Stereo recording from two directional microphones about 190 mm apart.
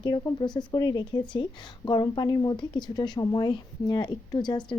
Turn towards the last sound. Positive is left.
turn(degrees=25)  # may be behind; listen again after turning